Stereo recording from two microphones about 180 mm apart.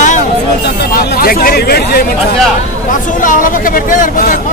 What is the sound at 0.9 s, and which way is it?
Speech, 55° left (ahead or behind).